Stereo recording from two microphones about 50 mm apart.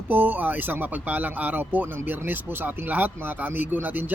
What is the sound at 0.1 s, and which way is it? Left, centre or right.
Speech, right.